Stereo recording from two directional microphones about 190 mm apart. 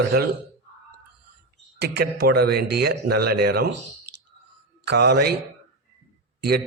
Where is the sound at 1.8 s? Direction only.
60° right (ahead or behind).